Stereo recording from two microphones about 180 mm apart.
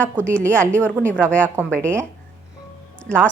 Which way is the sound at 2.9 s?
5° left (ahead or behind).